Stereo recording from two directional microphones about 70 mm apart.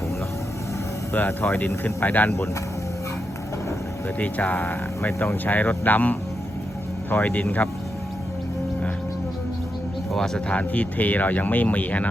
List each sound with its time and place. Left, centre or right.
1.1 s speech: left
4.2 s speech: left
10.1 s speech: centre
10.5 s speech: left